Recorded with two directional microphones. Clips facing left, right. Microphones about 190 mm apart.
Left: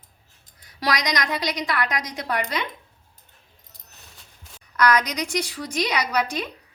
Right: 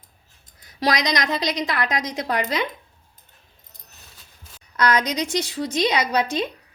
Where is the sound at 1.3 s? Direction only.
25° right (ahead or behind).